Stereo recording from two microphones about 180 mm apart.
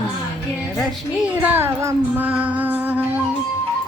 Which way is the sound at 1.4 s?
10° right (ahead or behind).